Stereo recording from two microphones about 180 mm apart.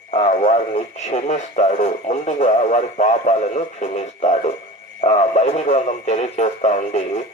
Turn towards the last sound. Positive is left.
turn(degrees=40)  # may be behind; listen again after turning